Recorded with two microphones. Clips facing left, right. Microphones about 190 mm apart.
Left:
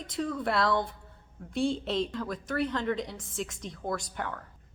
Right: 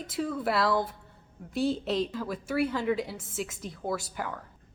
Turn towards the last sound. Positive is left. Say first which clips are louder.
# right 1 dB
turn(degrees=-5)  # may be behind; listen again after turning